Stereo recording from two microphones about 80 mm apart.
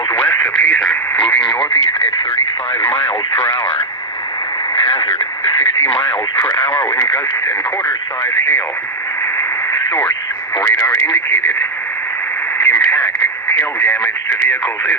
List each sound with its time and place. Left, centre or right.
0.6 s radio: centre
1.4 s radio: left
4.7 s radio: left
6.4 s speech: left
8.2 s speech: left
10.6 s speech: left
12.5 s radio: left
13.7 s speech: centre